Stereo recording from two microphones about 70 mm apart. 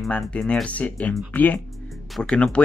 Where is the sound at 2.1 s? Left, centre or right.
Centre.